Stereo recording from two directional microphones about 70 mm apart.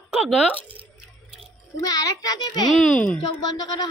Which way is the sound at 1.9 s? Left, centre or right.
Left.